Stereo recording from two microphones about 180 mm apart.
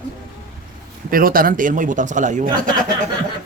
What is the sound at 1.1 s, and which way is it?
A man's voice, 50° right (ahead or behind).